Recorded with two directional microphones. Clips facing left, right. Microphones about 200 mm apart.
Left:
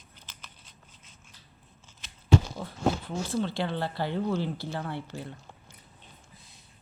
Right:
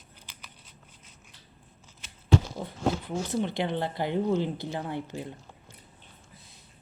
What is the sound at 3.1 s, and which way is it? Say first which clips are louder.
Speech: right 1 dB; 20° right (ahead or behind).